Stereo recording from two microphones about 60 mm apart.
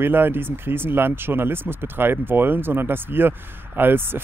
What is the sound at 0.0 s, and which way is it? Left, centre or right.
Speech, right.